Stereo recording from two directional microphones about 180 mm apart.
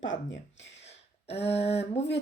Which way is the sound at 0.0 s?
90° left.